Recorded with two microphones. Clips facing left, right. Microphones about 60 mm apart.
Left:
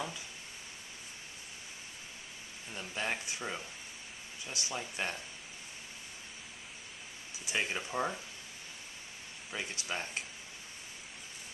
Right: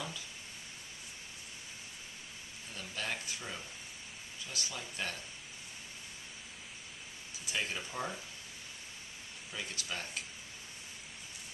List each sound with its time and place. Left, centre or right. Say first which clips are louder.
2.7 s speech: left 3 dB; left
7.4 s speech: left 3 dB; left
9.5 s speech: left 3 dB; left